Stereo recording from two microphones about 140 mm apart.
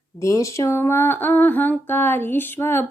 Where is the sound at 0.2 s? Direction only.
20° left (ahead or behind).